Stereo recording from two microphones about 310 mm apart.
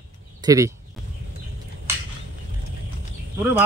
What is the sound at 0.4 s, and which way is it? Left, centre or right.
Speech, centre.